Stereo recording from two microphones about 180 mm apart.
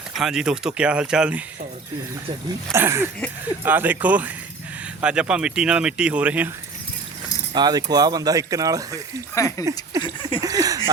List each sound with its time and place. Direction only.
0.2 s speech: 5° right (ahead or behind)
2.7 s speech: 15° right (ahead or behind)
7.5 s speech: 20° right (ahead or behind)
9.3 s speech: 15° left (ahead or behind)
10.0 s a sound: 30° left (ahead or behind)
10.4 s a sound: 20° right (ahead or behind)